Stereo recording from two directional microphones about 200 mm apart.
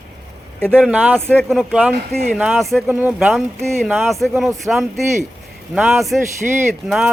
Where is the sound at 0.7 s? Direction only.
5° right (ahead or behind).